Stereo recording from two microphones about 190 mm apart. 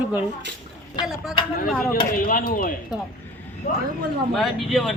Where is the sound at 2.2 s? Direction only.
45° left (ahead or behind).